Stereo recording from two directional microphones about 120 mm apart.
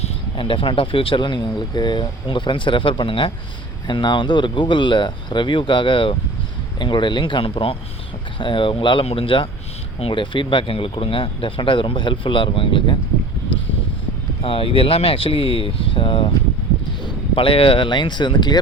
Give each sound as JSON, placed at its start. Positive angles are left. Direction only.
{"t": 0.0, "sound": "speech", "side_deg": 45}
{"t": 14.4, "sound": "speech", "side_deg": 50}
{"t": 17.3, "sound": "speech", "side_deg": 45}